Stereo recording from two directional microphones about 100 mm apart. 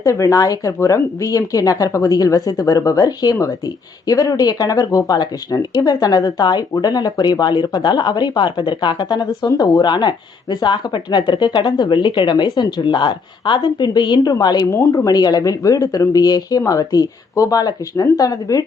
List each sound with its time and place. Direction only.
0.0 s speech: 30° left (ahead or behind)
14.7 s speech: 30° left (ahead or behind)